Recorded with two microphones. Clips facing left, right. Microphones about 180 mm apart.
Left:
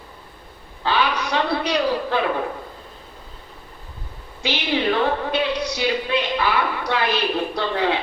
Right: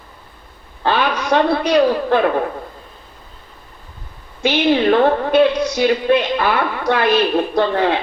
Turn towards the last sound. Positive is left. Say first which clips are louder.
# right 6 dB
turn(degrees=-50)  # may be behind; listen again after turning